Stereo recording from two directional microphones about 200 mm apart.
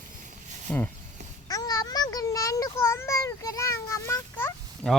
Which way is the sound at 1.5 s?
20° left (ahead or behind).